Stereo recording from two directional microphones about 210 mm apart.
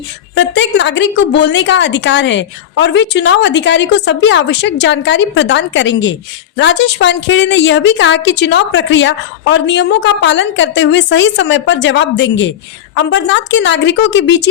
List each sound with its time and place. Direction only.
0.3 s a woman's voice: 60° left (ahead or behind)